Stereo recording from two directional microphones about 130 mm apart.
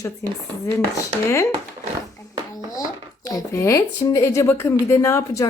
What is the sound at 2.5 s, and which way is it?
Speech, 30° left (ahead or behind).